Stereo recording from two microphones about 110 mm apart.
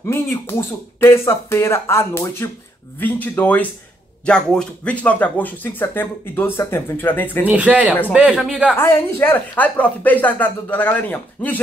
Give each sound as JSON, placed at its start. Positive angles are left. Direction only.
{"t": 0.0, "sound": "speech", "side_deg": 25}
{"t": 7.4, "sound": "speech", "side_deg": -10}
{"t": 8.7, "sound": "speech", "side_deg": 20}